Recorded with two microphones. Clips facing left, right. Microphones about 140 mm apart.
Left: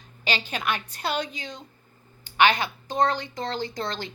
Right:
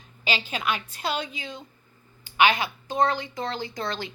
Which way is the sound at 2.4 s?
5° right (ahead or behind).